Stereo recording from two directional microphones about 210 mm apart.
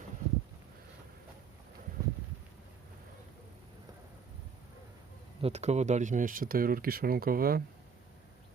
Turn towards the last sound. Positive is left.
turn(degrees=-45)  # may be behind; listen again after turning